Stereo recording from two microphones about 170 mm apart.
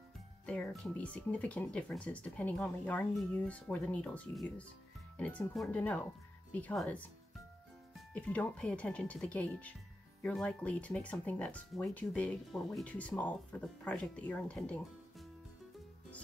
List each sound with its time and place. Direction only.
0.5 s speech: 5° left (ahead or behind)